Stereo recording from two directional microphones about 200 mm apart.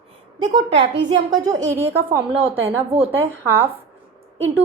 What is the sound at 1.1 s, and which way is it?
A woman's voice, 20° right (ahead or behind).